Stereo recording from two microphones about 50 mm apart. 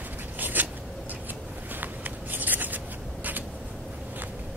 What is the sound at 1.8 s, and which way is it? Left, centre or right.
Writing, right.